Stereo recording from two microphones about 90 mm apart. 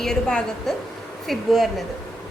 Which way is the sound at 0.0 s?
5° left (ahead or behind).